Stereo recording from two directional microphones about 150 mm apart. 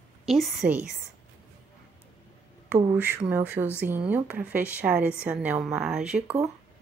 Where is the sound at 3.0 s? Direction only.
10° right (ahead or behind).